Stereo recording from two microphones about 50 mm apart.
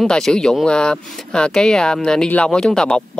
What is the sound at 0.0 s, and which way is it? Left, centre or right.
Speech, centre.